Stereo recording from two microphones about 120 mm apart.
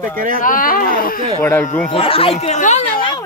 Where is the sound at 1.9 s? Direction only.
50° left (ahead or behind); by 2.8 s 85° left.